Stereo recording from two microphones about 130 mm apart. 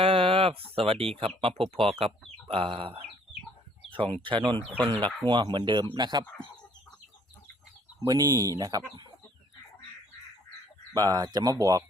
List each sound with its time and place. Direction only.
0.0 s speech: 45° right (ahead or behind)
8.0 s speech: 30° right (ahead or behind)
10.9 s speech: 30° right (ahead or behind)